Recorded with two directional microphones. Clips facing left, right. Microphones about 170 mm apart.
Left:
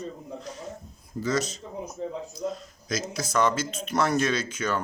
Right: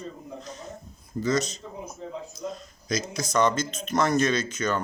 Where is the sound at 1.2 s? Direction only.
5° left (ahead or behind).